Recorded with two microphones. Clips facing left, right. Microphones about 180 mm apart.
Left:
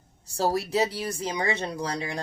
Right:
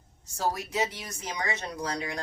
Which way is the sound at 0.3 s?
35° left (ahead or behind).